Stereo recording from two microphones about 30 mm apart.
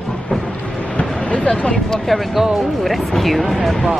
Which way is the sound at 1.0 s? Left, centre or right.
Left.